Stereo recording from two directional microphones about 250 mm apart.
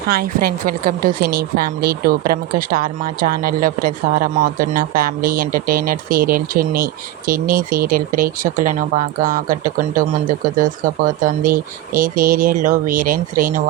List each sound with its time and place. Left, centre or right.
0.1 s a woman's voice: right